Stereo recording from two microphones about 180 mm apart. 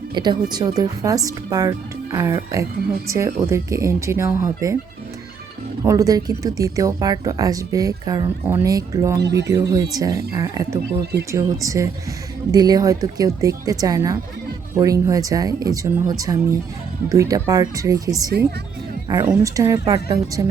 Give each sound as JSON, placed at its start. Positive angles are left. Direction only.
{"t": 0.1, "sound": "speech", "side_deg": -25}
{"t": 5.8, "sound": "a woman's voice", "side_deg": -15}